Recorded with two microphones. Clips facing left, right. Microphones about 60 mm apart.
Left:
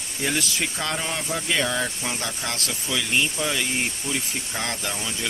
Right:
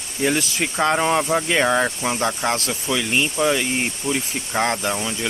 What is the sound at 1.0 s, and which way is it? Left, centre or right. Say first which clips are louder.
Speech: right 10 dB; right.